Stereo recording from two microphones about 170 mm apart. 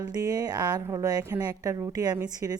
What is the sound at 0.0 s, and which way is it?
A woman's voice, 20° right (ahead or behind).